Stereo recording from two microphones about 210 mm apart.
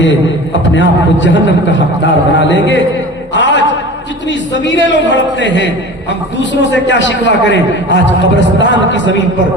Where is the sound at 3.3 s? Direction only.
60° left (ahead or behind).